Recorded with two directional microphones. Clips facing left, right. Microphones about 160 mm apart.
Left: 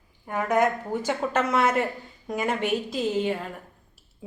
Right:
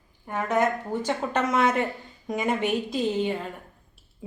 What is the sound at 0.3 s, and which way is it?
A woman's voice, 10° left (ahead or behind).